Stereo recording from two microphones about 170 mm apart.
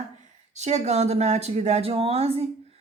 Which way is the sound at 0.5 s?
40° right (ahead or behind).